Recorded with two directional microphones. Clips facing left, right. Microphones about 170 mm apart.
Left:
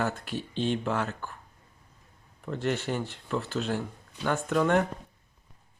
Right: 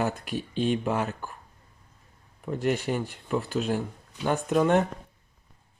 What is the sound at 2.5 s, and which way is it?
Speech, 15° right (ahead or behind).